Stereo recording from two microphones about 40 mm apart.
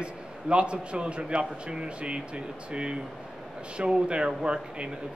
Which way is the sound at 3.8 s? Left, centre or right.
Right.